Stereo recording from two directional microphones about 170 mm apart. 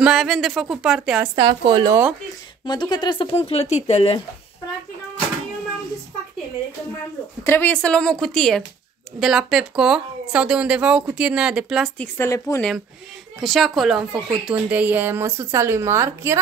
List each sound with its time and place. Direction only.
0.0 s speech: centre (ahead or behind)
1.3 s a woman's voice: 25° right (ahead or behind)
2.6 s speech: 25° left (ahead or behind)
7.4 s speech: 10° left (ahead or behind); by 11.9 s 5° right (ahead or behind)
12.0 s a woman's voice: 15° left (ahead or behind)
13.4 s speech: centre (ahead or behind); by 16.3 s 15° right (ahead or behind)